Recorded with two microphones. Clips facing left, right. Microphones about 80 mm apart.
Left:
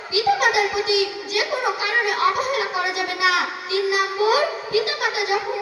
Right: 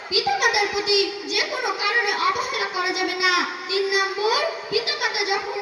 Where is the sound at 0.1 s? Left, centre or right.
Left.